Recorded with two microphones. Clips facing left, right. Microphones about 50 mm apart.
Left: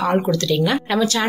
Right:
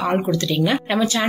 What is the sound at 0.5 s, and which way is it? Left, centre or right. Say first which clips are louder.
Speech: left 1 dB; centre.